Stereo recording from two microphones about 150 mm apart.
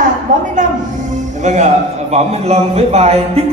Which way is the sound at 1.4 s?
50° right (ahead or behind).